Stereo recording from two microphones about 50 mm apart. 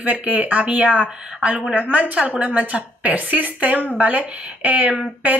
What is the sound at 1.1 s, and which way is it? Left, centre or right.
Speech, centre.